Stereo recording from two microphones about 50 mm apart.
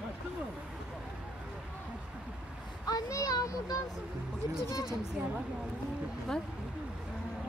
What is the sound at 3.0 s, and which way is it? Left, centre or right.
Speech, left.